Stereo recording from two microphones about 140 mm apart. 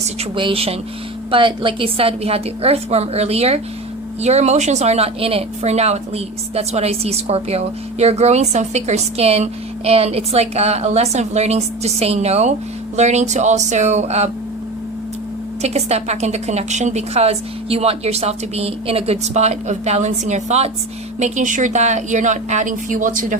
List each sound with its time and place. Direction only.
0.3 s a woman's voice: 40° right (ahead or behind)
15.6 s a woman's voice: 50° right (ahead or behind); by 23.4 s 70° right (ahead or behind)